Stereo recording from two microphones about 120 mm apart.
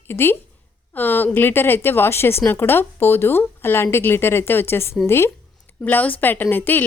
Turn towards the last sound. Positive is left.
turn(degrees=15)  # may be behind; listen again after turning